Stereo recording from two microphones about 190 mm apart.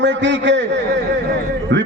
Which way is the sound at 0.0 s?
70° right (ahead or behind).